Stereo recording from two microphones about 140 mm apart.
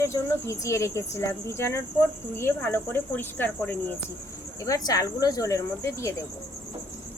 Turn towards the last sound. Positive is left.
turn(degrees=20)  # may be behind; listen again after turning